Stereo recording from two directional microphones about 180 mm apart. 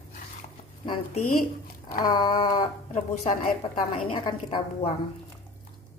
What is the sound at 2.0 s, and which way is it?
Speech, 25° left (ahead or behind).